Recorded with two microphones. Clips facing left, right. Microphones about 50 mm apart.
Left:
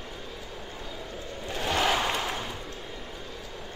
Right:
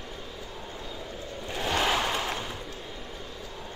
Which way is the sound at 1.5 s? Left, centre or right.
Centre.